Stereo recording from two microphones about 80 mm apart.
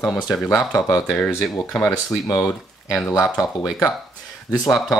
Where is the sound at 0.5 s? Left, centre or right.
Left.